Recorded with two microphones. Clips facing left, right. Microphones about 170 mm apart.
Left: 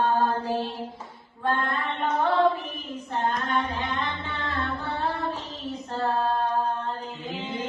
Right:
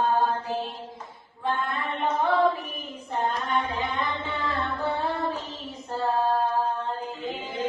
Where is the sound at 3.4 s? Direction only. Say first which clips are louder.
Even; centre (ahead or behind).